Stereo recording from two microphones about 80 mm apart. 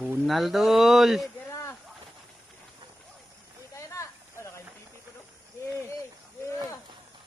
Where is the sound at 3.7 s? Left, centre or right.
Left.